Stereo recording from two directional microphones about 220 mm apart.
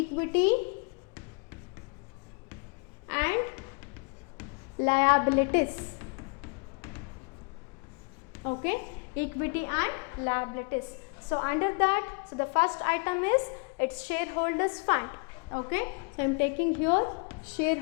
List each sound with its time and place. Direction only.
0.0 s speech: 15° left (ahead or behind)
3.1 s a sound: 10° left (ahead or behind)
8.6 s a woman's voice: 15° left (ahead or behind)